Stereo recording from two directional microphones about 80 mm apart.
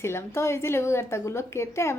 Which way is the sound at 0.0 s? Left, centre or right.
Left.